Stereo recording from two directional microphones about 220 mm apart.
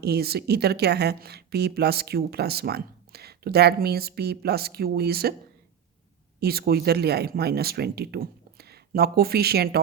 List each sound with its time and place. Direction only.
0.0 s speech: 45° right (ahead or behind)
6.4 s speech: 45° right (ahead or behind)